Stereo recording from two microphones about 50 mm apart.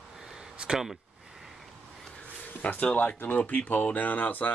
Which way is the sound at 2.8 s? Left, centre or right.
Left.